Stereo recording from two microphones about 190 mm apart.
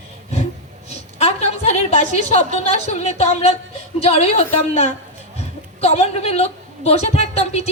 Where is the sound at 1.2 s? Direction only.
35° left (ahead or behind).